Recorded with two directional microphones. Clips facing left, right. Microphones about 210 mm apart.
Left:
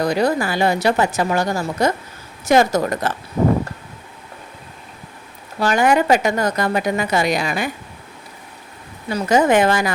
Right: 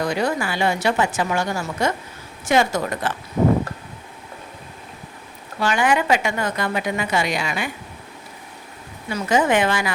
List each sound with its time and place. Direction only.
0.0 s a woman's voice: 35° left (ahead or behind)
5.5 s a woman's voice: 40° left (ahead or behind)
9.0 s a woman's voice: 40° left (ahead or behind)